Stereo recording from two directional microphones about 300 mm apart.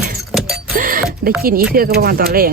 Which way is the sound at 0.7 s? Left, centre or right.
Right.